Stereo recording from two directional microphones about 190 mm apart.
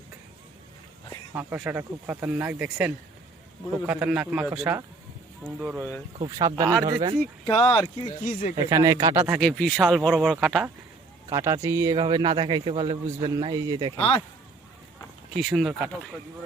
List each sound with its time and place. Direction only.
1.3 s a man's voice: 10° right (ahead or behind)
7.5 s speech: 30° left (ahead or behind)
8.2 s speech: 45° left (ahead or behind)
8.5 s speech: 15° right (ahead or behind)
9.4 s a man's voice: 5° left (ahead or behind)
11.3 s a man's voice: 20° right (ahead or behind)
15.4 s a man's voice: centre (ahead or behind)